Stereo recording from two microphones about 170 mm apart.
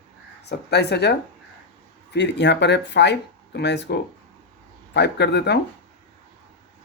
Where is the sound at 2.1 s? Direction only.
90° left.